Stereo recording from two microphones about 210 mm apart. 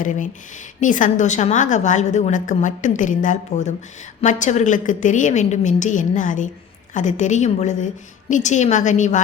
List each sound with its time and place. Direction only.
0.0 s a woman's voice: 40° left (ahead or behind)